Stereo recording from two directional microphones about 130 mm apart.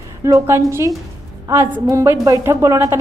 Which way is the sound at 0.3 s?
25° right (ahead or behind).